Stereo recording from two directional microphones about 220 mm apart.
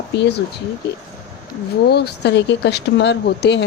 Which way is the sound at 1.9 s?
50° left (ahead or behind).